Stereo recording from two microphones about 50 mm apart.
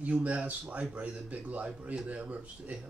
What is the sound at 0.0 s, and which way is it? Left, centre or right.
Speech, right.